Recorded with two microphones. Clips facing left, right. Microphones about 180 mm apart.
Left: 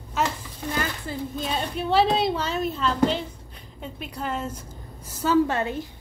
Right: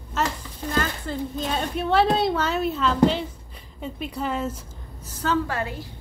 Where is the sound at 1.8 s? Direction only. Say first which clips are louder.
Right 1 dB; centre (ahead or behind).